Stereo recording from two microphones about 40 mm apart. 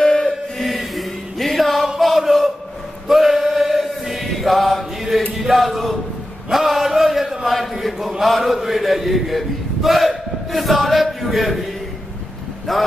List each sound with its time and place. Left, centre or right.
0.0 s chant: centre
0.3 s chant: centre
5.4 s speech: centre
6.5 s a sound: centre
8.2 s chant: centre
12.7 s speech: centre